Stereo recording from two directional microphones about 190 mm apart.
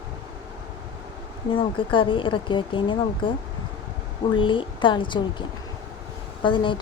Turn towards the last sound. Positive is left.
turn(degrees=25)  # may be behind; listen again after turning